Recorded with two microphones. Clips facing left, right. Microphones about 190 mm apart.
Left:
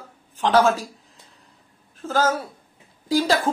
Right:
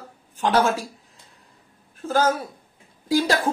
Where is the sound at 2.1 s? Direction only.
15° right (ahead or behind).